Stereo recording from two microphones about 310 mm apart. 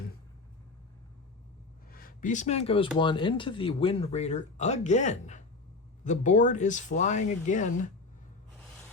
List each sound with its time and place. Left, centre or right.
1.9 s speech: left